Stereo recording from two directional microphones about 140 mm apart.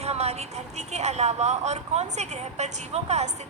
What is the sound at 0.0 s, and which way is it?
A woman's voice, 50° right (ahead or behind).